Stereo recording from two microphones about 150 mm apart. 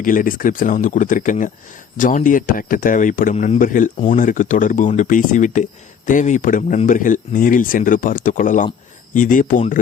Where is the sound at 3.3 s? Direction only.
45° left (ahead or behind).